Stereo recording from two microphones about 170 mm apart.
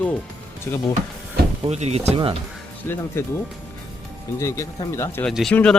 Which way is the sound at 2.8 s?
10° left (ahead or behind).